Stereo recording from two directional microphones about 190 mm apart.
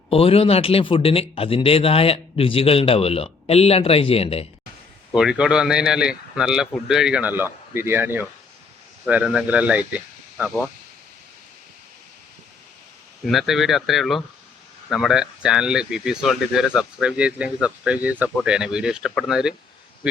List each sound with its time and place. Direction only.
0.1 s a man's voice: 30° left (ahead or behind)
5.1 s speech: 5° right (ahead or behind)
13.2 s speech: centre (ahead or behind)